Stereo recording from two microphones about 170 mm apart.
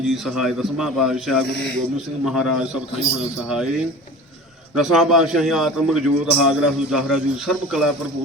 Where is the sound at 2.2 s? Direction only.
Centre (ahead or behind).